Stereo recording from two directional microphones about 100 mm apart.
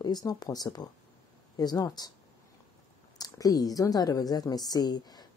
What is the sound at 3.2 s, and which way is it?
A woman's voice, 40° left (ahead or behind).